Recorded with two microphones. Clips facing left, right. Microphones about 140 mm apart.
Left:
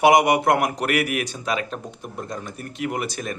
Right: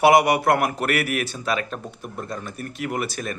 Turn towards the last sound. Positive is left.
turn(degrees=20)  # may be behind; listen again after turning